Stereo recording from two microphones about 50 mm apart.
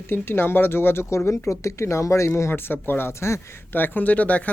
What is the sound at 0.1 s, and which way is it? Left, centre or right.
Speech, left.